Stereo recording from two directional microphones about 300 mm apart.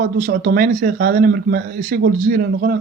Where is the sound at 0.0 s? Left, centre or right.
Right.